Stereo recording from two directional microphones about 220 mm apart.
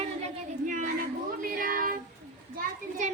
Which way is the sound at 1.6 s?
40° right (ahead or behind).